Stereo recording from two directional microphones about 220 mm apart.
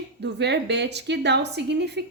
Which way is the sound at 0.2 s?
50° right (ahead or behind).